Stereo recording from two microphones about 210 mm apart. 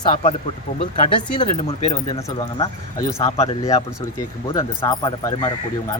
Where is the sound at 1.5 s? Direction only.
35° left (ahead or behind).